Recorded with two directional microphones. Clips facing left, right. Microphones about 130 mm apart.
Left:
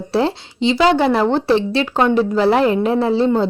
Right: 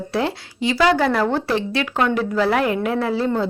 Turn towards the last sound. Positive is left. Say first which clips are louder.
# left 5 dB
turn(degrees=30)  # may be behind; listen again after turning